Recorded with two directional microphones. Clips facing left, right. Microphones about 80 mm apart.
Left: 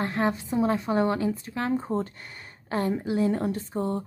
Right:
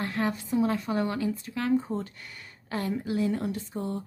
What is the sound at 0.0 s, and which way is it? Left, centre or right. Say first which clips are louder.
Speech: left 3 dB; left.